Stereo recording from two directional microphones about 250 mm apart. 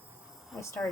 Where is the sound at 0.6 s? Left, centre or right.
Centre.